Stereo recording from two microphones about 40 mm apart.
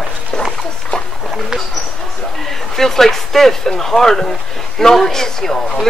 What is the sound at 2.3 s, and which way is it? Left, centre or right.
Speech, centre.